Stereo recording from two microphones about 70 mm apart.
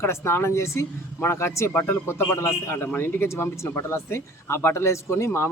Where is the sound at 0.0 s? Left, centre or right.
Left.